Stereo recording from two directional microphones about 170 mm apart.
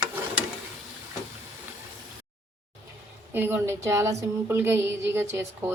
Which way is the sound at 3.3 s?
10° right (ahead or behind).